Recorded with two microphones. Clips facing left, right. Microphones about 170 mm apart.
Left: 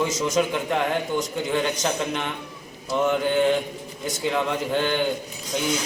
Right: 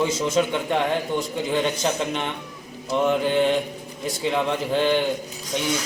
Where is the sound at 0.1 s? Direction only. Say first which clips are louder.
Right 1 dB; 30° right (ahead or behind).